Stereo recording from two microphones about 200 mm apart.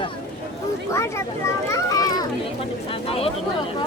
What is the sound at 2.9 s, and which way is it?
Speech, 30° left (ahead or behind).